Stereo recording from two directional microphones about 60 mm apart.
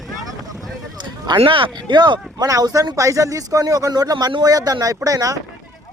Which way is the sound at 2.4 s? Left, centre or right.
Right.